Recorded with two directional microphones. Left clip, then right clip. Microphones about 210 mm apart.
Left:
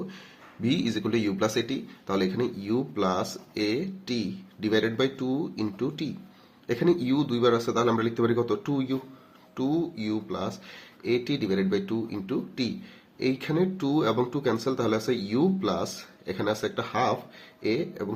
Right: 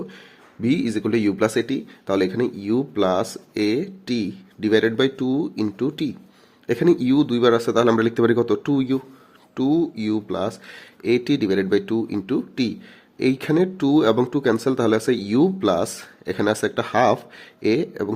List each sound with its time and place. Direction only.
0.6 s speech: 30° right (ahead or behind)